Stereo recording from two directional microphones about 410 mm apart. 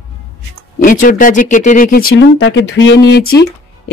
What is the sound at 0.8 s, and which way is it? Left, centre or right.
Speech, centre.